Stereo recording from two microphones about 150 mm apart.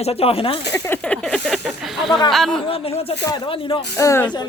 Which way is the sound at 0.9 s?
5° left (ahead or behind).